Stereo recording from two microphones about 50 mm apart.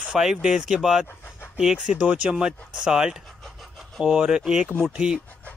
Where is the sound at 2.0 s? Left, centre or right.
Right.